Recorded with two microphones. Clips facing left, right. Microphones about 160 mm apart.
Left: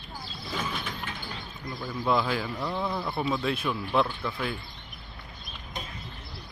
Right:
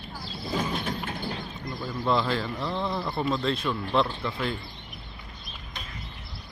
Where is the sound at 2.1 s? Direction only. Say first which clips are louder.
Right 1 dB; 5° left (ahead or behind).